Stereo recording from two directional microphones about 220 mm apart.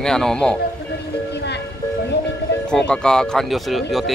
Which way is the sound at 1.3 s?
50° left (ahead or behind).